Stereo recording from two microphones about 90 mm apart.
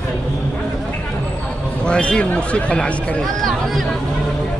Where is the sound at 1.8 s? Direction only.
10° left (ahead or behind).